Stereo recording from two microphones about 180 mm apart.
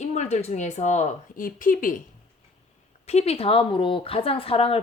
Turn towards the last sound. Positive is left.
turn(degrees=30)  # may be behind; listen again after turning